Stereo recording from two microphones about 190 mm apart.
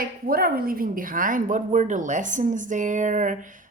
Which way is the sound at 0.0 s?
50° right (ahead or behind).